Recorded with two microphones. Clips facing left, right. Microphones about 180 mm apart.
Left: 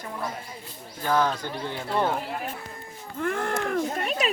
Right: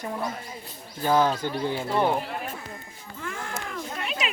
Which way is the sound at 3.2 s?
60° left (ahead or behind).